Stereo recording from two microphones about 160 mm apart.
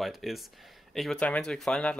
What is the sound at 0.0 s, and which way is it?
Speech, centre (ahead or behind).